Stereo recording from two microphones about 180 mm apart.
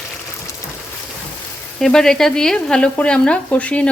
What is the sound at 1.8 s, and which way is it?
Frying, 5° left (ahead or behind).